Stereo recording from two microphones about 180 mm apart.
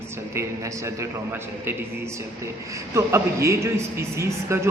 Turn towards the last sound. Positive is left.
turn(degrees=-15)  # may be behind; listen again after turning